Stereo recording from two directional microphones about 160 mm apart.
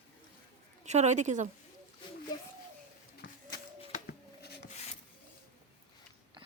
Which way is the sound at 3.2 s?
90° left.